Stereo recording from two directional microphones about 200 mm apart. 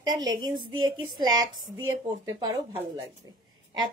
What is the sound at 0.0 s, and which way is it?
A woman's voice, 20° right (ahead or behind).